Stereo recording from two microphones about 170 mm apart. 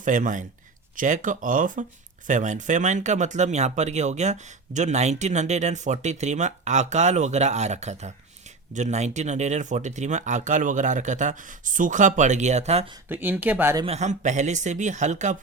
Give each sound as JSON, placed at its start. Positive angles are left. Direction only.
{"t": 0.0, "sound": "speech", "side_deg": -50}
{"t": 13.1, "sound": "speech", "side_deg": -10}
{"t": 13.8, "sound": "speech", "side_deg": -40}